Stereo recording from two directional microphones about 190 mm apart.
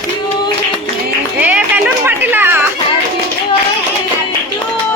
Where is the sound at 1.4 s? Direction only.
10° right (ahead or behind).